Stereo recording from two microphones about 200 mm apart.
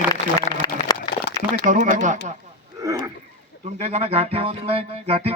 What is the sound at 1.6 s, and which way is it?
Music, 40° right (ahead or behind).